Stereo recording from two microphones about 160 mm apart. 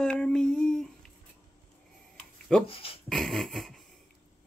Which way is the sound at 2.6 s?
35° left (ahead or behind).